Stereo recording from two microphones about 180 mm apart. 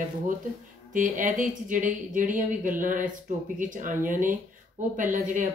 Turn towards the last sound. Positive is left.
turn(degrees=-45)  # may be behind; listen again after turning